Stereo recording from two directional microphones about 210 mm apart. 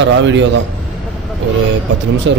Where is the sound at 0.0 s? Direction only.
60° right (ahead or behind).